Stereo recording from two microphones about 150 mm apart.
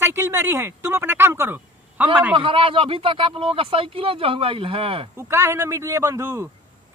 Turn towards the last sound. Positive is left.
turn(degrees=-20)  # may be behind; listen again after turning